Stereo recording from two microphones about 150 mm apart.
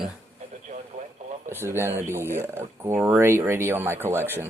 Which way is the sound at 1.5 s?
15° right (ahead or behind).